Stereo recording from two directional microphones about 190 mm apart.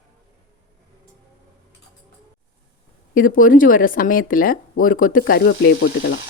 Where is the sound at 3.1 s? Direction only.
45° left (ahead or behind).